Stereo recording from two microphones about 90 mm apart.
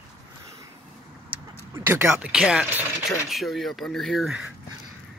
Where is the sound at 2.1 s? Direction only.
10° right (ahead or behind).